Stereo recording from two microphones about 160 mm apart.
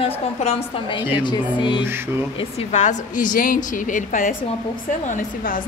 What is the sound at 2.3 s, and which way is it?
A woman's voice, 45° left (ahead or behind).